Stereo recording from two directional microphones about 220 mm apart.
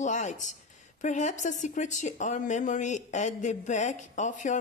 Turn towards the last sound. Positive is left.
turn(degrees=35)  # may be behind; listen again after turning